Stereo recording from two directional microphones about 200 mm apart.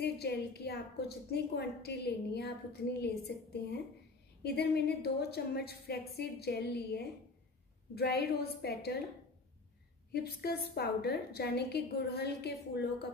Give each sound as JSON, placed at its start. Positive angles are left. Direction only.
{"t": 0.0, "sound": "a woman's voice", "side_deg": 55}
{"t": 10.1, "sound": "a woman's voice", "side_deg": 50}